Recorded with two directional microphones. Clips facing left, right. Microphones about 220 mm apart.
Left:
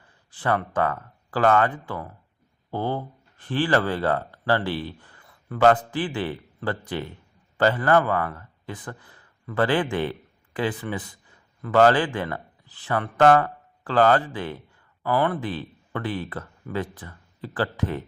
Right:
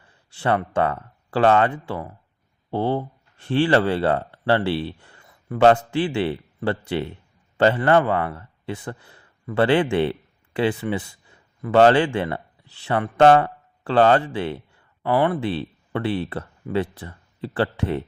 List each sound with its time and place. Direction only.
0.3 s a man's voice: 25° right (ahead or behind)